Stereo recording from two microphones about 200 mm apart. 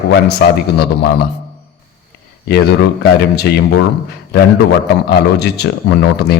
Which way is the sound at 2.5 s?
55° left (ahead or behind).